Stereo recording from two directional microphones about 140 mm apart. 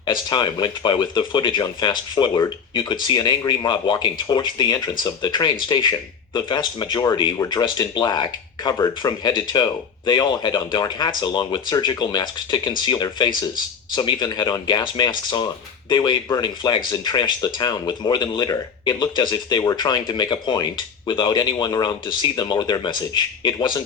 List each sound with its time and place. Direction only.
0.0 s speech: 30° left (ahead or behind)